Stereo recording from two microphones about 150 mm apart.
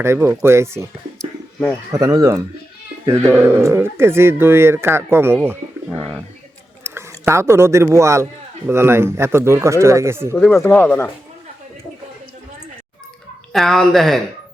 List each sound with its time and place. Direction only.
0.0 s a man's voice: 15° right (ahead or behind)
1.2 s a sound: 5° left (ahead or behind)
1.9 s a man's voice: 25° right (ahead or behind)
6.8 s chewing: 15° right (ahead or behind)
7.3 s a man's voice: 15° right (ahead or behind)
10.3 s speech: 5° left (ahead or behind)
10.6 s speech: 15° left (ahead or behind)
13.5 s speech: centre (ahead or behind)